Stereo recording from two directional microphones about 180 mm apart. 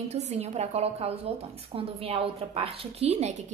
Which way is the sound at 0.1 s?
35° right (ahead or behind).